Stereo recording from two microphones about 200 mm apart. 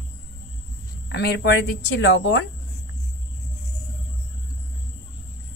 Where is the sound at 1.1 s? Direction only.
55° left (ahead or behind).